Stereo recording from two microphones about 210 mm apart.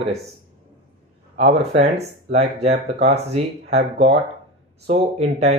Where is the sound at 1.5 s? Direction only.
30° right (ahead or behind).